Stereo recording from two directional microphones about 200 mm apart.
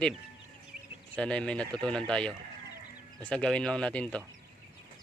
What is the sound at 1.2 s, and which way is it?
Speech, 5° left (ahead or behind).